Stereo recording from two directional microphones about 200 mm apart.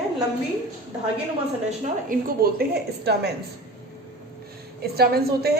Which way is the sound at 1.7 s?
45° right (ahead or behind).